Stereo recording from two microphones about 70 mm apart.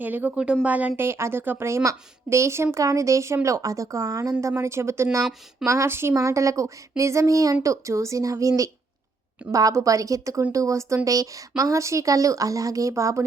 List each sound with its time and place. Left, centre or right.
0.0 s speech: right
0.9 s a woman's voice: right
6.1 s a woman's voice: right